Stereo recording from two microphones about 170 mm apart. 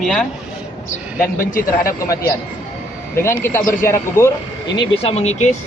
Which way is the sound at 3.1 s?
15° left (ahead or behind).